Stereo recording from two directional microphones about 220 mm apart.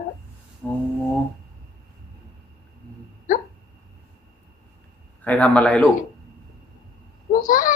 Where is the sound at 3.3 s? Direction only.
40° left (ahead or behind).